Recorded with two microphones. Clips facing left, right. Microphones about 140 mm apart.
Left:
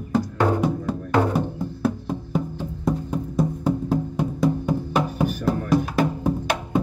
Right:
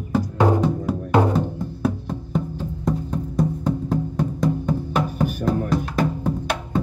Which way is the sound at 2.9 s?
10° left (ahead or behind).